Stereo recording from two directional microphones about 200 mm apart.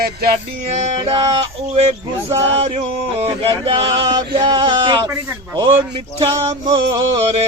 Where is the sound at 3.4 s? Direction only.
25° right (ahead or behind).